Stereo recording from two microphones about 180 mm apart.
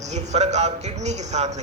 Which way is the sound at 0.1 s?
40° right (ahead or behind).